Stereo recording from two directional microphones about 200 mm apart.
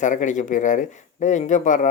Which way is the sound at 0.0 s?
40° left (ahead or behind).